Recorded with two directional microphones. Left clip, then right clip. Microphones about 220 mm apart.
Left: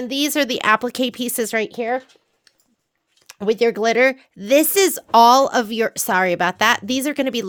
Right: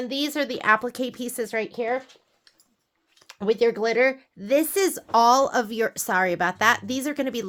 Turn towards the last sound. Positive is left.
turn(degrees=35)  # may be behind; listen again after turning